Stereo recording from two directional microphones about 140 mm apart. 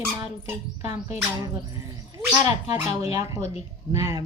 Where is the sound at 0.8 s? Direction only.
50° left (ahead or behind).